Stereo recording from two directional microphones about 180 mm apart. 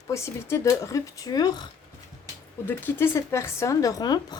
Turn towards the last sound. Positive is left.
turn(degrees=20)  # may be behind; listen again after turning